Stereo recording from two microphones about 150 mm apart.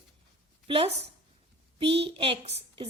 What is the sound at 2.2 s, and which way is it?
Speech, 40° right (ahead or behind).